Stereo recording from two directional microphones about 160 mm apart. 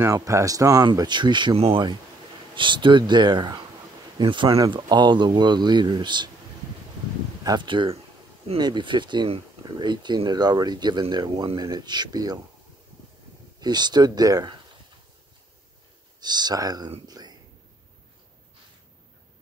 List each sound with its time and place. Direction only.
0.0 s speech: 20° right (ahead or behind)
7.4 s speech: 30° right (ahead or behind)
13.6 s speech: 25° right (ahead or behind)
16.2 s speech: 25° right (ahead or behind)
17.1 s a sound: 25° right (ahead or behind)